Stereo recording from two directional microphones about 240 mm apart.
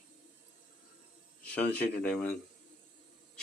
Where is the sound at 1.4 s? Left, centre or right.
Centre.